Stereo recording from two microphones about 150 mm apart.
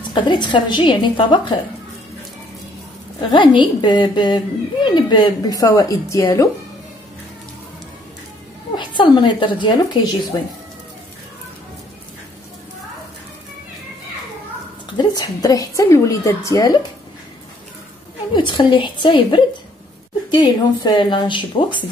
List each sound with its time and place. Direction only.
0.1 s speech: 30° left (ahead or behind)
3.2 s a woman's voice: 30° left (ahead or behind)
8.7 s a woman's voice: 30° left (ahead or behind)
15.0 s a woman's voice: 25° left (ahead or behind)
18.3 s speech: 30° left (ahead or behind)